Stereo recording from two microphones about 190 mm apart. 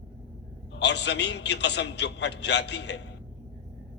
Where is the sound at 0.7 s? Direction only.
65° left (ahead or behind).